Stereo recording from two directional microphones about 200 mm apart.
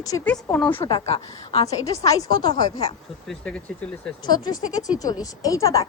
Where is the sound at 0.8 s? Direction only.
25° left (ahead or behind).